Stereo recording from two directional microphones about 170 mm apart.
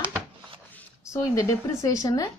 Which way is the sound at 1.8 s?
20° left (ahead or behind).